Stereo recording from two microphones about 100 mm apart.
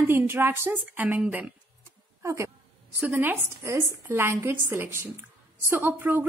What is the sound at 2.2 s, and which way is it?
A woman's voice, 30° right (ahead or behind).